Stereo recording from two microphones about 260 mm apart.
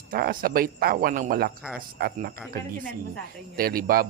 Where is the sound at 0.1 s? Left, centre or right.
Right.